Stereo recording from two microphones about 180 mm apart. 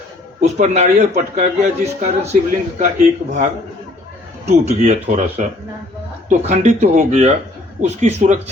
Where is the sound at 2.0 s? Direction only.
40° right (ahead or behind).